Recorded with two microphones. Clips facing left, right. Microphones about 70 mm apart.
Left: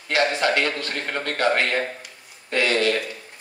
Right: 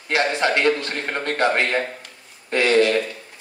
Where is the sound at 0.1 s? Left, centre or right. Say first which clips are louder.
Right 1 dB; right.